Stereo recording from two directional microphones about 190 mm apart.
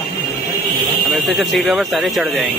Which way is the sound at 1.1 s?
Centre (ahead or behind).